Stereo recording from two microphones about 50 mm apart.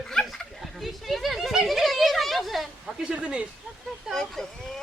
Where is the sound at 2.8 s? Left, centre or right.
Centre.